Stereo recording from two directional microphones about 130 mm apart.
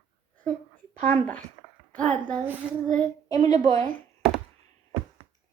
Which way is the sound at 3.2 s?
30° left (ahead or behind).